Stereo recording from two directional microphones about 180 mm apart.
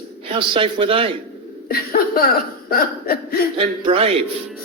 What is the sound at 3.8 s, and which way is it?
Speech, 30° right (ahead or behind).